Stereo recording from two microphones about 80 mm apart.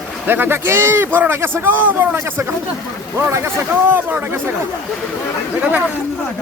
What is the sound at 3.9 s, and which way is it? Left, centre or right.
Speech, right.